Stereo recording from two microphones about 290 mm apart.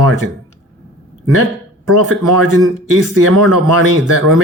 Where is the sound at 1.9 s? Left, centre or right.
Right.